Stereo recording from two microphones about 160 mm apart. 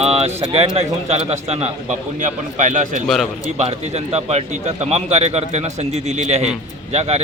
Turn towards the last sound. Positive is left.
turn(degrees=-40)  # may be behind; listen again after turning